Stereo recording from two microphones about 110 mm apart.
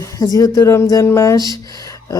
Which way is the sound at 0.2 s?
30° left (ahead or behind).